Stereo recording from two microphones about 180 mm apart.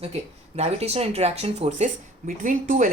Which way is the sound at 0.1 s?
35° right (ahead or behind).